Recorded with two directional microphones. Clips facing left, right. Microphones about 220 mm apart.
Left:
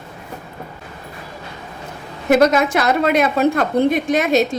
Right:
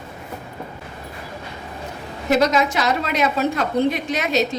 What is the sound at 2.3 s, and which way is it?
A woman's voice, 55° left (ahead or behind).